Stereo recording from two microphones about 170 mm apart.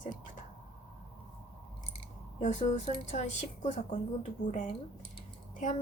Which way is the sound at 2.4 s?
45° left (ahead or behind).